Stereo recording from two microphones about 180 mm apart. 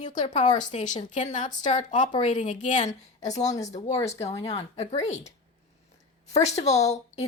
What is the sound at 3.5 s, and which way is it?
Speech, 20° left (ahead or behind).